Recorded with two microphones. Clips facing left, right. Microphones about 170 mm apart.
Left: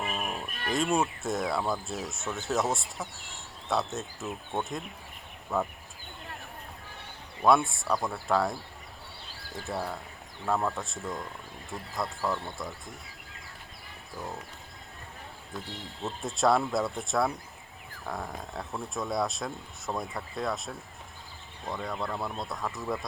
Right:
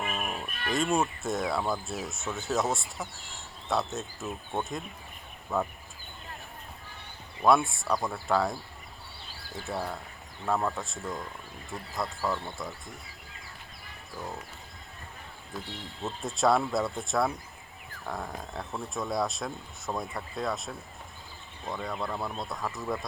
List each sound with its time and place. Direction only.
0.1 s music: centre (ahead or behind)
0.7 s speech: centre (ahead or behind)
7.4 s speech: centre (ahead or behind)
15.5 s speech: centre (ahead or behind)